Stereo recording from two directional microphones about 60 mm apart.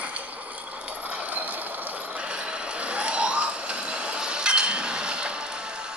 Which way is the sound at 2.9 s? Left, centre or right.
Centre.